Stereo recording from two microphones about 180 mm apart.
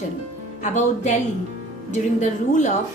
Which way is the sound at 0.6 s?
40° left (ahead or behind).